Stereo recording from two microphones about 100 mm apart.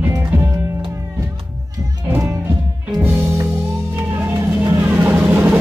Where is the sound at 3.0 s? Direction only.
20° right (ahead or behind).